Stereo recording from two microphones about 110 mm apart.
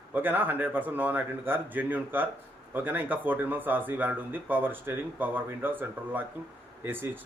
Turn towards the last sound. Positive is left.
turn(degrees=-20)  # may be behind; listen again after turning